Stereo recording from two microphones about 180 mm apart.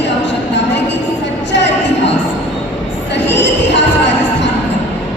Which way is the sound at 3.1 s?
75° left (ahead or behind).